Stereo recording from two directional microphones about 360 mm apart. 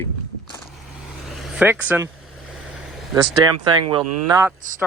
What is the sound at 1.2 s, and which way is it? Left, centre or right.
Vehicle, centre.